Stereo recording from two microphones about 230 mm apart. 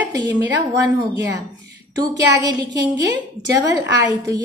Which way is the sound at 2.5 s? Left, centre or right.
Right.